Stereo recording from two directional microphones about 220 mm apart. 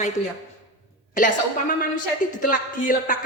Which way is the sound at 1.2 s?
35° left (ahead or behind).